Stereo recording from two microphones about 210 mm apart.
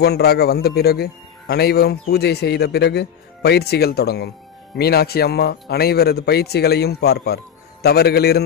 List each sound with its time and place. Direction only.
0.0 s a man's voice: 50° left (ahead or behind)